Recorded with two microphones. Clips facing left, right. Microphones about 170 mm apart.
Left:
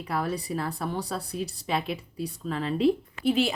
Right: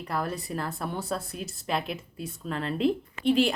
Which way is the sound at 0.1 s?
Centre (ahead or behind).